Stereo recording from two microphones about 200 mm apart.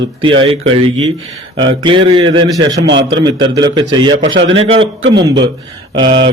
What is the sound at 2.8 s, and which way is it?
Speech, 65° right (ahead or behind).